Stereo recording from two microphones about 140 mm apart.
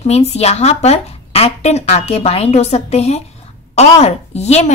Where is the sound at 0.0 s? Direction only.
50° left (ahead or behind).